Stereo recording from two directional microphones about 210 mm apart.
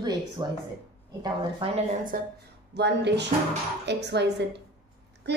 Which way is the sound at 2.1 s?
40° right (ahead or behind).